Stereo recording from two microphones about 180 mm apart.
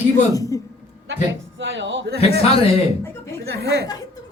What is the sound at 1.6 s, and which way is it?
Speech, 85° right.